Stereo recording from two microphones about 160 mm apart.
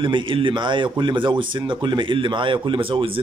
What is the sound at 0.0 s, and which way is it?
Speech, 30° right (ahead or behind).